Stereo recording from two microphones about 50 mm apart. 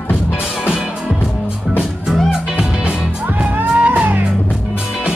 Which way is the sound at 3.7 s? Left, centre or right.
Right.